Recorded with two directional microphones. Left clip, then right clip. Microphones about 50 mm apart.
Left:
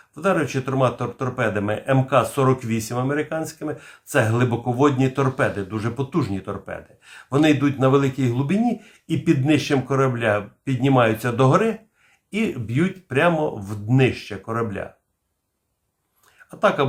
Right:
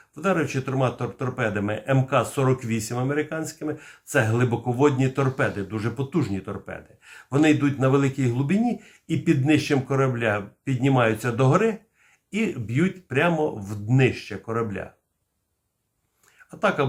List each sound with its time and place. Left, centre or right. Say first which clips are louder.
0.1 s speech: left 3 dB; left
2.9 s speech: left 4 dB; centre
3.2 s speech: left 2 dB; left
4.2 s speech: left 3 dB; centre
4.5 s speech: left 1 dB; left
5.7 s speech: left 2 dB; left
16.5 s speech: left 4 dB; left